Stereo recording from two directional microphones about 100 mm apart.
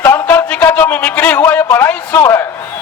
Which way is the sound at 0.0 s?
20° left (ahead or behind).